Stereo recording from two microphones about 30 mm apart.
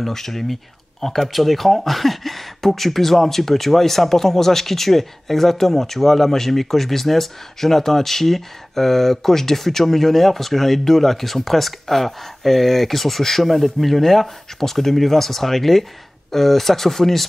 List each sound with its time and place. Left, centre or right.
0.0 s speech: centre